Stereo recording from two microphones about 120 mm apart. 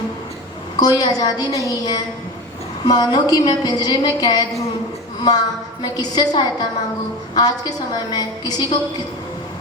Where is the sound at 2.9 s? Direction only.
35° left (ahead or behind).